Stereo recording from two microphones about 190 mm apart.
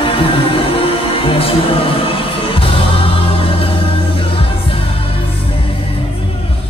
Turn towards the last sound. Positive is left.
turn(degrees=30)  # may be behind; listen again after turning